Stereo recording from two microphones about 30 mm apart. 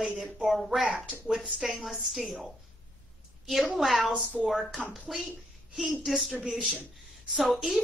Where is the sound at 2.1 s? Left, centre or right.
Centre.